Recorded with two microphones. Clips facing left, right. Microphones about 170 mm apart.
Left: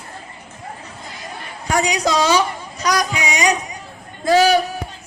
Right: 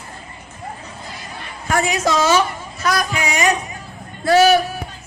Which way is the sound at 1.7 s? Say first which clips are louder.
Even; 15° left (ahead or behind).